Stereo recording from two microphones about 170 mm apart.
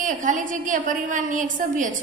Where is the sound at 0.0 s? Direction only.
50° right (ahead or behind).